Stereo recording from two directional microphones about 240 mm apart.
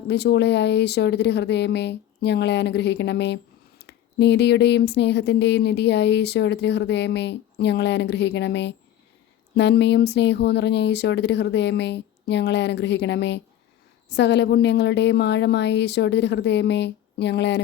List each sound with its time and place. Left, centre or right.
0.1 s speech: left